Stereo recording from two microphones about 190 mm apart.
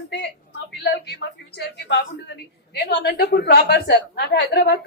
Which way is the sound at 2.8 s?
55° left (ahead or behind).